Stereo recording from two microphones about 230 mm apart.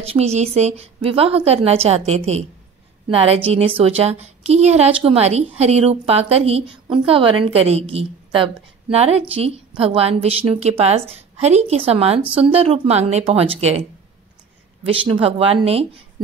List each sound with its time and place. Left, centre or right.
0.1 s a woman's voice: right
14.9 s a woman's voice: right